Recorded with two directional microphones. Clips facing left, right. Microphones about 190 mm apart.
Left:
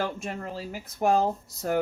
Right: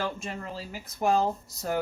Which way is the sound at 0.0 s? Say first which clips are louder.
Left 2 dB; 55° left (ahead or behind).